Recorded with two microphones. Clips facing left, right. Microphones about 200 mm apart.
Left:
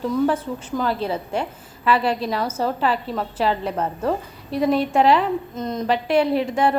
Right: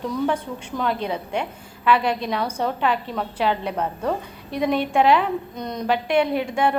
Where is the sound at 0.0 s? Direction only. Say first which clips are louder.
Left 3 dB; 5° left (ahead or behind).